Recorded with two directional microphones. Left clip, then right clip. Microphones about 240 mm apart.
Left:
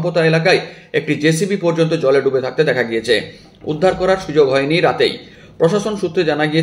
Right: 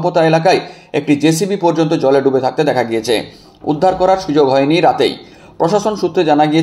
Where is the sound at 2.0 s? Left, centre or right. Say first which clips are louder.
Right 4 dB; right.